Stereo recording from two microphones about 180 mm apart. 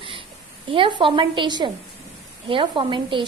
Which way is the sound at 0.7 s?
25° right (ahead or behind).